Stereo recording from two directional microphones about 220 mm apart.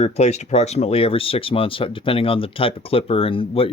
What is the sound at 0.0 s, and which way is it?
Speech, 30° left (ahead or behind).